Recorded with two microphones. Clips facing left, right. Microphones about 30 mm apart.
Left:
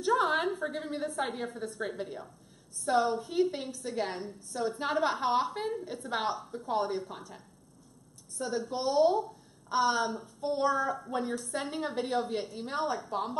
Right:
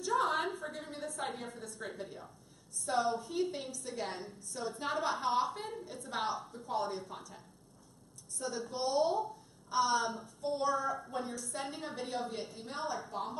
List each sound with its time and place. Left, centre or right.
0.1 s a sound: centre
0.6 s a woman's voice: left
1.3 s a woman's voice: centre
1.6 s a woman's voice: left